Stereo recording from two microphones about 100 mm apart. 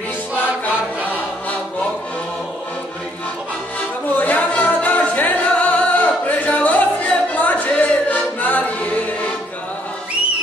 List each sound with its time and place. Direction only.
4.1 s music: 15° left (ahead or behind)